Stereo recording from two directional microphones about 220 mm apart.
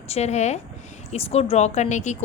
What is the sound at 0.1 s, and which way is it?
Speech, 30° left (ahead or behind).